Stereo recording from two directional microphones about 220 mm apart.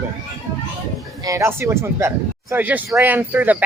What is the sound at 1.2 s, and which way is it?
Speech, 10° right (ahead or behind).